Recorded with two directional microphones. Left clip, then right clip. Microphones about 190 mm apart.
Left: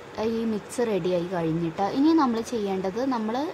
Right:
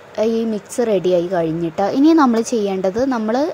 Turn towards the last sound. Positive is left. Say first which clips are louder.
# right 9 dB
turn(degrees=-35)  # may be behind; listen again after turning